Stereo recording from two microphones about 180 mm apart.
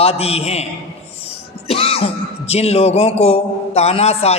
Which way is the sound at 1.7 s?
30° left (ahead or behind).